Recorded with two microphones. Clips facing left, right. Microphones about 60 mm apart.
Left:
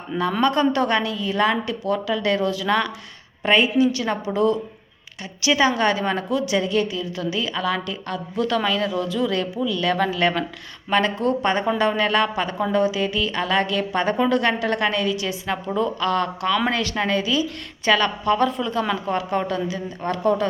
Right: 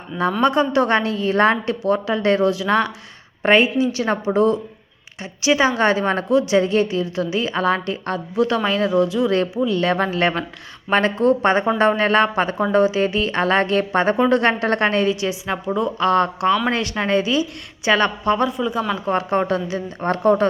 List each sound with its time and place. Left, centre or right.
0.1 s speech: centre
0.4 s a woman's voice: right
3.4 s a woman's voice: right
8.4 s a woman's voice: right
15.6 s speech: centre
16.0 s a woman's voice: right
18.3 s speech: centre
19.0 s a woman's voice: right